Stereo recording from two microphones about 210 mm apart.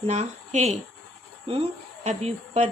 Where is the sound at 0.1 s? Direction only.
35° right (ahead or behind).